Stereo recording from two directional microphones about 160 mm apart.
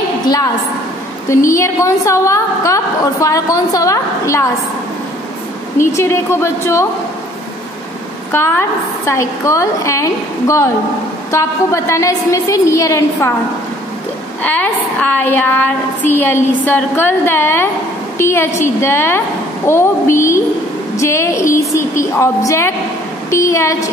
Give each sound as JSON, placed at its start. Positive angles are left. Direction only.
{"t": 1.3, "sound": "a woman's voice", "side_deg": 20}
{"t": 5.9, "sound": "a woman's voice", "side_deg": 15}
{"t": 8.3, "sound": "a woman's voice", "side_deg": 15}
{"t": 14.4, "sound": "a woman's voice", "side_deg": 10}